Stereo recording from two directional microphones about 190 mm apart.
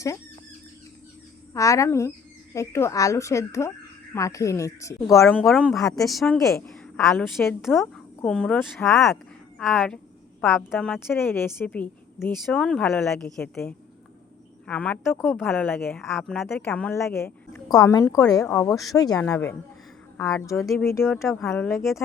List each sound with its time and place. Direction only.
1.5 s a woman's voice: 15° left (ahead or behind)
5.4 s a woman's voice: centre (ahead or behind); by 9.0 s 15° left (ahead or behind)
9.6 s a woman's voice: centre (ahead or behind)